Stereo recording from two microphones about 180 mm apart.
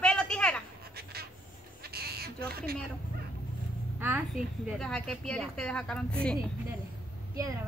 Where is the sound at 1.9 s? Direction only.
60° right (ahead or behind).